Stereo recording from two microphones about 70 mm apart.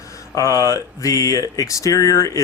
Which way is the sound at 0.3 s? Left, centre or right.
Left.